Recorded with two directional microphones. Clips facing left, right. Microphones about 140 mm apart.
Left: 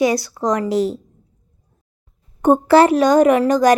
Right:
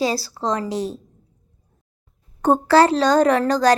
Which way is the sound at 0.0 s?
30° right (ahead or behind).